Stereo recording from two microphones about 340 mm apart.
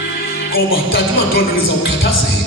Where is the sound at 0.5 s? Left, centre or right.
Left.